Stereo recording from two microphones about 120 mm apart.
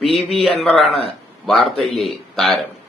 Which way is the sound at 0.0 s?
55° left (ahead or behind).